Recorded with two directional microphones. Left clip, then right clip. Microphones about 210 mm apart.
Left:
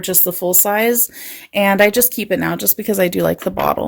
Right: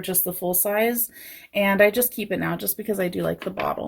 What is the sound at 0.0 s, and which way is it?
Speech, 40° left (ahead or behind).